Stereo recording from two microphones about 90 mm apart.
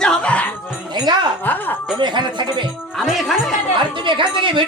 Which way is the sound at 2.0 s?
60° right (ahead or behind).